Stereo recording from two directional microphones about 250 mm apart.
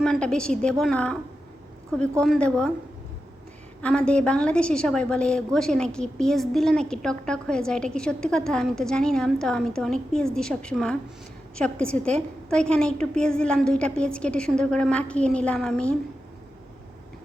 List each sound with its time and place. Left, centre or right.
0.0 s a woman's voice: centre
3.8 s a woman's voice: centre